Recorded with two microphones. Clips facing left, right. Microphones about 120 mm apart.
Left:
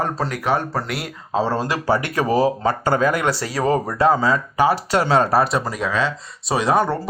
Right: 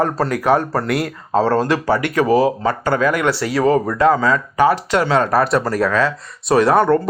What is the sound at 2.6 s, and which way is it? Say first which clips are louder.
Speech: right 1 dB; 40° left (ahead or behind).